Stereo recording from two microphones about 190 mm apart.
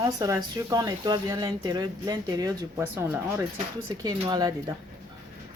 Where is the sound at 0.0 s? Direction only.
20° right (ahead or behind).